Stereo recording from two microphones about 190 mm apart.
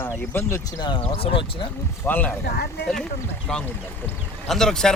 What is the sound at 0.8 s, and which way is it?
Speech, 25° left (ahead or behind).